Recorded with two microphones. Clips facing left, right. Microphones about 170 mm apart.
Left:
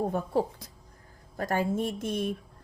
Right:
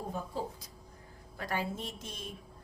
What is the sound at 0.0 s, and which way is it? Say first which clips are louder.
Speech: left 10 dB; 60° left (ahead or behind).